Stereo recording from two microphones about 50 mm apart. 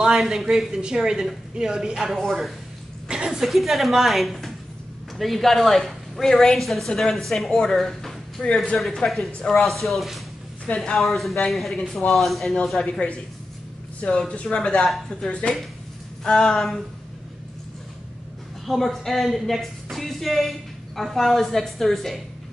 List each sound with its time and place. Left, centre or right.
0.0 s speech: centre
2.1 s a woman's voice: centre
3.1 s a sound: centre
3.3 s a woman's voice: centre
8.7 s a woman's voice: centre
12.8 s a woman's voice: left
14.5 s speech: centre
16.5 s a woman's voice: centre
18.7 s a woman's voice: centre